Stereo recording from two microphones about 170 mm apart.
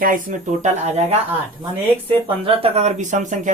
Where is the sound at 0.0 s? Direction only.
50° right (ahead or behind).